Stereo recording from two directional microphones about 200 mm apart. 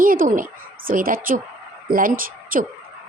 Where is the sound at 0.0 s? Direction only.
45° right (ahead or behind).